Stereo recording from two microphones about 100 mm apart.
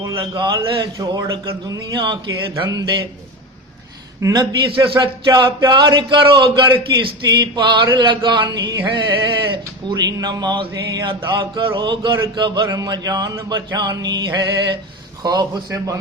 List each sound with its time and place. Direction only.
0.3 s a man's voice: 50° right (ahead or behind)
4.2 s a man's voice: 40° right (ahead or behind)